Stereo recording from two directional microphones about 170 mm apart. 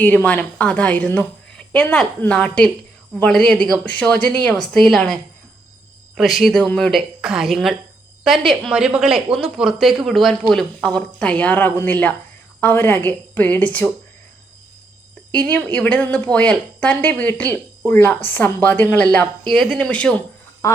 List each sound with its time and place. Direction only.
0.3 s a woman's voice: 5° left (ahead or behind)
15.3 s a woman's voice: 10° left (ahead or behind)
20.6 s quack: 20° left (ahead or behind)